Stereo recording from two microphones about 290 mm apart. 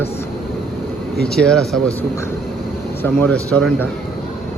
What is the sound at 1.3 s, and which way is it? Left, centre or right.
Speech, centre.